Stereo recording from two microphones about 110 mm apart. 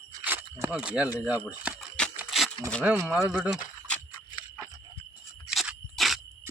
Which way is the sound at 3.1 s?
5° right (ahead or behind).